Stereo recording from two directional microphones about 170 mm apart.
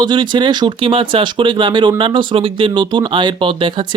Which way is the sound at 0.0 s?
25° right (ahead or behind).